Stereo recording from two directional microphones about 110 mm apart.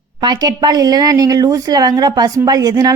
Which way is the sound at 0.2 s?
40° right (ahead or behind).